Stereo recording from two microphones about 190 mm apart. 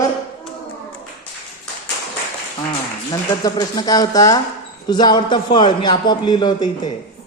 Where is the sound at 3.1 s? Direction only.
20° left (ahead or behind).